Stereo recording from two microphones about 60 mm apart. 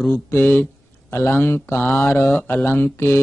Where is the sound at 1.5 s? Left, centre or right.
Left.